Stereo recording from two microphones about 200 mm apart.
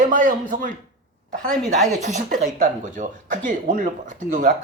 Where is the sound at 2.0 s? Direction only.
35° right (ahead or behind).